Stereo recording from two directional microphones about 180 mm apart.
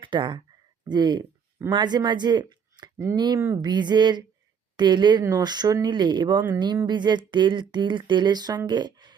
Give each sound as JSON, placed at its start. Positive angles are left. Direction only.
{"t": 0.0, "sound": "speech", "side_deg": -25}